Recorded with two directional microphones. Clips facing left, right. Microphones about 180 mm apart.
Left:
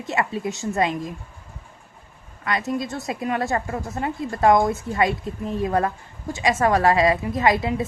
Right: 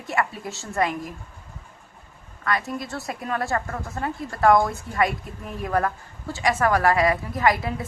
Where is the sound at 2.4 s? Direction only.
20° left (ahead or behind).